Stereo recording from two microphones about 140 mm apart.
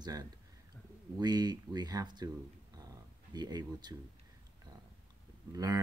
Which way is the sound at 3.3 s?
30° right (ahead or behind).